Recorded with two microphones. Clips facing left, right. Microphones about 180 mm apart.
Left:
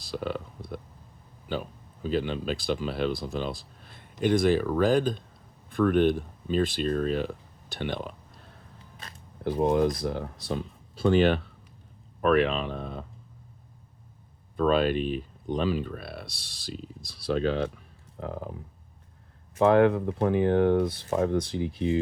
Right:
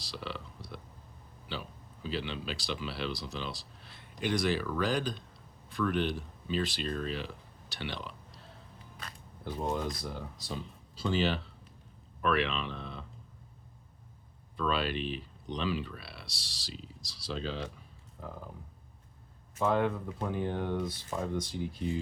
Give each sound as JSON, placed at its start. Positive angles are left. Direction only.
{"t": 0.0, "sound": "a sound", "side_deg": 50}
{"t": 1.5, "sound": "speech", "side_deg": 50}
{"t": 9.4, "sound": "speech", "side_deg": 60}
{"t": 14.5, "sound": "speech", "side_deg": 50}
{"t": 19.5, "sound": "speech", "side_deg": 70}